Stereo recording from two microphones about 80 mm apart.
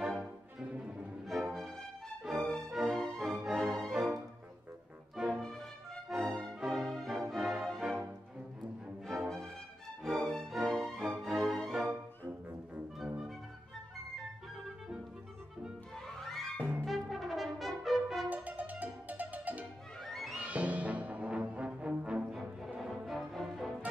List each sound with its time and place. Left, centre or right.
0.1 s music: centre
6.0 s music: centre
9.0 s music: centre
10.0 s music: centre
13.0 s music: centre
16.1 s music: centre
16.5 s music: right
16.8 s brass instrument: centre
18.3 s music: right
20.0 s music: centre
20.3 s music: centre
22.8 s music: centre